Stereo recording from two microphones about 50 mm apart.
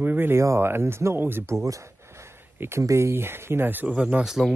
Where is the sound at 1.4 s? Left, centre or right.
Right.